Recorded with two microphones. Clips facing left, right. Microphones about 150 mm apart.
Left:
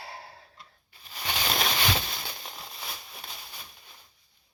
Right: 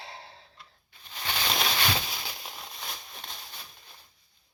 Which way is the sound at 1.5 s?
Centre (ahead or behind).